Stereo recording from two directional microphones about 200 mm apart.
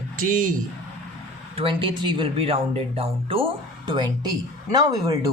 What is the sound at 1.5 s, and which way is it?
Speech, 25° right (ahead or behind).